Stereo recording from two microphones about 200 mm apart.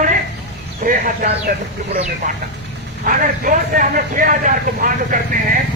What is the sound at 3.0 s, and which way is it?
Speech, 40° right (ahead or behind).